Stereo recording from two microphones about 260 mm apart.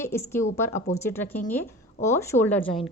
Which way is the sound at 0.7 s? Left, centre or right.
Left.